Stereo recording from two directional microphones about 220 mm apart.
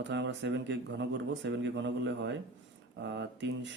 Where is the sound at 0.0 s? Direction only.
50° right (ahead or behind).